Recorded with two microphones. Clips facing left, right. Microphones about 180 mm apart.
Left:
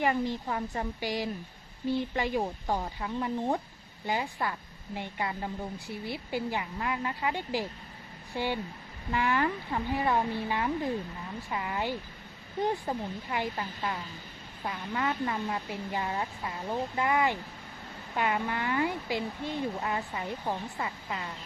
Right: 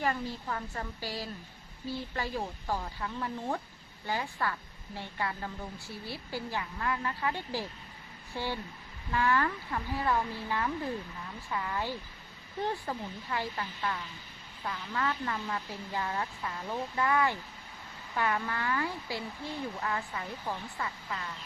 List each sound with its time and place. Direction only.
0.0 s speech: 15° left (ahead or behind)